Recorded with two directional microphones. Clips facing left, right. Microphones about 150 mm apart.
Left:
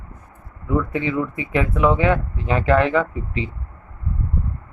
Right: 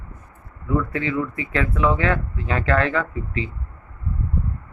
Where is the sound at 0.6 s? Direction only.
20° left (ahead or behind).